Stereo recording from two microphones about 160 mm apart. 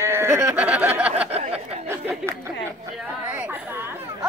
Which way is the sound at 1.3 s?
40° right (ahead or behind).